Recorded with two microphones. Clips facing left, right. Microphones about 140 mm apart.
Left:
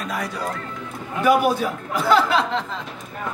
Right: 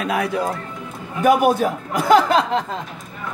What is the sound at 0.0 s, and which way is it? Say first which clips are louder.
Speech: right 6 dB; 65° right (ahead or behind).